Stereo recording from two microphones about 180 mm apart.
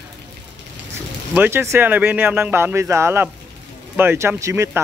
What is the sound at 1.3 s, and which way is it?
Speech, 10° right (ahead or behind).